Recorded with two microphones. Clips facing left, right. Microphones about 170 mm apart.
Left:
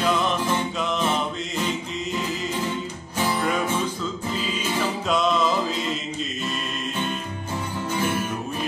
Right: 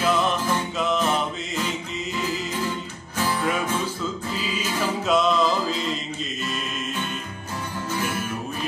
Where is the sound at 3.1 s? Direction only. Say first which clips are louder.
Left 1 dB; 15° left (ahead or behind).